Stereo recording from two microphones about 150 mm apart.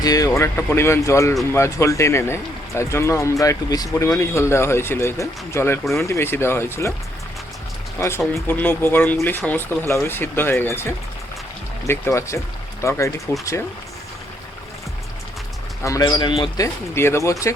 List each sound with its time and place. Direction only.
0.0 s speech: 25° left (ahead or behind)
7.9 s speech: 15° left (ahead or behind)
15.8 s speech: 25° left (ahead or behind)